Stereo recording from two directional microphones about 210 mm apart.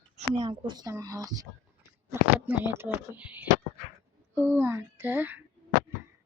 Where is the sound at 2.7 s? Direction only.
10° right (ahead or behind).